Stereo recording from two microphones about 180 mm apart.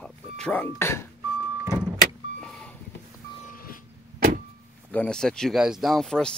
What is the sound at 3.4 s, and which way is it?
Vehicle, 50° left (ahead or behind).